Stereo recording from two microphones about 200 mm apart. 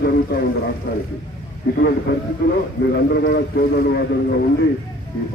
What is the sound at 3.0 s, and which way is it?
A man's voice, 55° left (ahead or behind).